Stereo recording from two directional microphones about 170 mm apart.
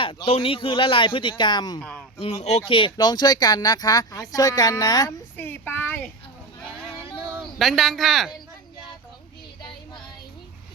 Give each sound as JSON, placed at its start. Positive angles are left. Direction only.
{"t": 0.0, "sound": "speech", "side_deg": 30}
{"t": 1.8, "sound": "speech", "side_deg": 5}
{"t": 2.1, "sound": "speech", "side_deg": 35}
{"t": 5.4, "sound": "speech", "side_deg": 10}
{"t": 7.6, "sound": "speech", "side_deg": 0}